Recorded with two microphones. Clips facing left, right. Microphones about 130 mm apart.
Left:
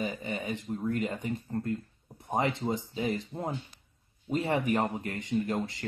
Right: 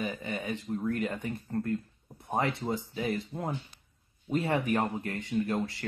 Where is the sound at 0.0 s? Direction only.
15° left (ahead or behind).